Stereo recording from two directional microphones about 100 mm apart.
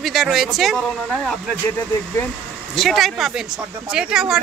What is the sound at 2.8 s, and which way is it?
Speech, centre (ahead or behind).